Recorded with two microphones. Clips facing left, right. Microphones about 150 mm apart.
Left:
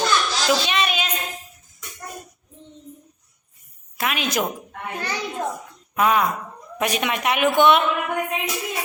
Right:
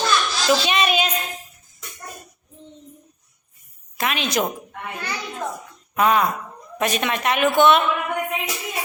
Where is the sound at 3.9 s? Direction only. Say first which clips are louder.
Right 1 dB; 5° left (ahead or behind).